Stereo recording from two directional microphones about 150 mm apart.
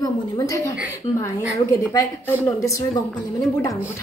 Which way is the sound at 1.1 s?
40° left (ahead or behind).